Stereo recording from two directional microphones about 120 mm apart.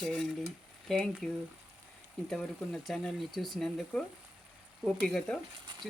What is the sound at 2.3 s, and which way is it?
Speech, 5° left (ahead or behind).